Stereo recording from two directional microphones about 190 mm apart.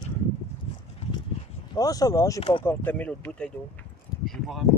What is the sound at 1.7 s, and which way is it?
Speech, 20° left (ahead or behind).